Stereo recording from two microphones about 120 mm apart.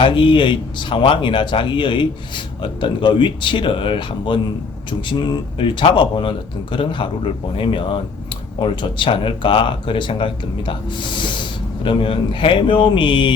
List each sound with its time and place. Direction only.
0.0 s speech: 45° left (ahead or behind)